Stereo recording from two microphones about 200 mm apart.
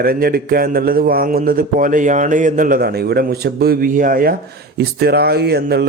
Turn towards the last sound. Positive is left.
turn(degrees=-55)  # may be behind; listen again after turning